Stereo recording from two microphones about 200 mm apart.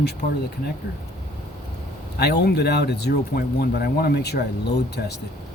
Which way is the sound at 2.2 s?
55° left (ahead or behind).